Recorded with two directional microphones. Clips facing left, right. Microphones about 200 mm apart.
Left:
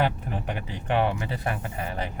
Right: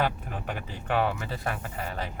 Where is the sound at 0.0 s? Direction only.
20° left (ahead or behind).